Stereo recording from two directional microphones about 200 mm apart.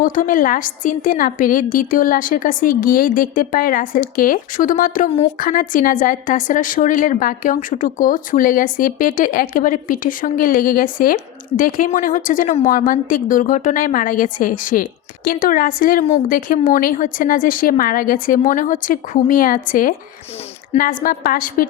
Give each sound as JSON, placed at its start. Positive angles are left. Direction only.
{"t": 0.0, "sound": "a woman's voice", "side_deg": 40}